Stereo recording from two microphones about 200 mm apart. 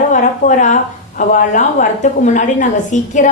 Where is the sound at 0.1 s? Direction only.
40° left (ahead or behind).